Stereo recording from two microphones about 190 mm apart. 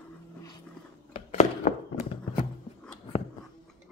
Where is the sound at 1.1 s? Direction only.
35° left (ahead or behind).